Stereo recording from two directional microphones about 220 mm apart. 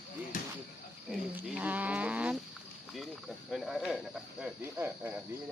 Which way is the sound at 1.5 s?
5° right (ahead or behind).